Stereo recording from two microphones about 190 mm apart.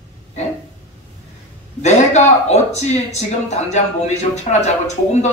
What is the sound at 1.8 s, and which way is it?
A man's voice, 35° left (ahead or behind).